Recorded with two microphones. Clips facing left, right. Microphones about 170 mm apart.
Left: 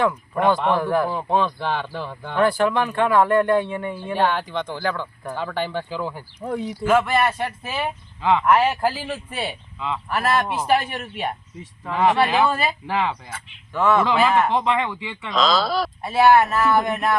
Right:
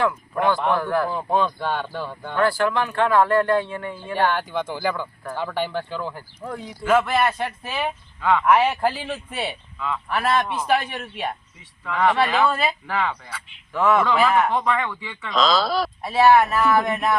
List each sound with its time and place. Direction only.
0.7 s speech: 15° left (ahead or behind); by 2.3 s centre (ahead or behind)
2.3 s speech: 20° left (ahead or behind)
4.1 s speech: centre (ahead or behind)
6.4 s speech: 20° left (ahead or behind)
6.8 s speech: 5° left (ahead or behind)
8.2 s speech: 20° left (ahead or behind)
8.4 s speech: centre (ahead or behind)
9.7 s speech: 20° left (ahead or behind)
10.1 s speech: 5° left (ahead or behind)
11.8 s speech: 20° left (ahead or behind); by 12.7 s 5° left (ahead or behind)
12.9 s speech: 20° left (ahead or behind)
13.7 s speech: centre (ahead or behind)
14.5 s speech: 20° left (ahead or behind)
15.3 s speech: centre (ahead or behind)